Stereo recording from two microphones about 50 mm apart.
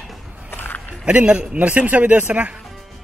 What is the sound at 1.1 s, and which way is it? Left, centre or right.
A man's voice, right.